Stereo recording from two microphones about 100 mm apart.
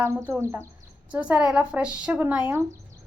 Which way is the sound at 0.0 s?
25° right (ahead or behind).